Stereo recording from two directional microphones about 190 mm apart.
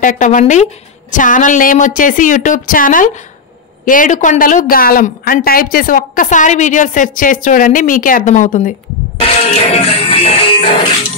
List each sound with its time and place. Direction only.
0.0 s music: 45° left (ahead or behind)
1.1 s speech: 45° left (ahead or behind)
9.6 s music: 30° left (ahead or behind)